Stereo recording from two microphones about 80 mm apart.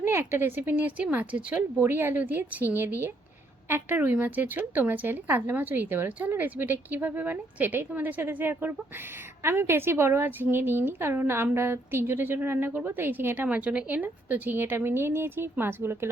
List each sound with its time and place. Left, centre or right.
0.0 s speech: right